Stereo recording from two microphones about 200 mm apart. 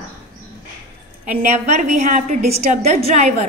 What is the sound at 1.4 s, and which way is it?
A woman's voice, 35° right (ahead or behind).